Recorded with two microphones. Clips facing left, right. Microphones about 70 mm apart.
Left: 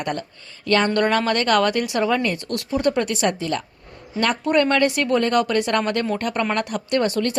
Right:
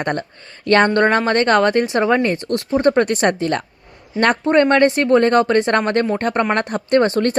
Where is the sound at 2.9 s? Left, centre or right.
Right.